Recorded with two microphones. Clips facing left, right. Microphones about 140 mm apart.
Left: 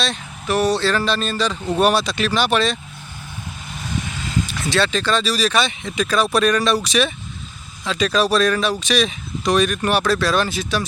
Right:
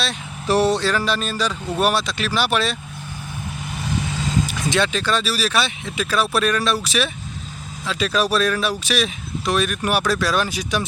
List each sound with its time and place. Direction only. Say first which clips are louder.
0.4 s music: right 1 dB; 35° right (ahead or behind)
0.7 s speech: left 1 dB; 15° right (ahead or behind)
4.4 s speech: even; 15° right (ahead or behind)